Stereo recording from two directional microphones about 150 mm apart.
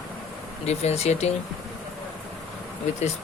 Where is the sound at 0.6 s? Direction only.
45° left (ahead or behind).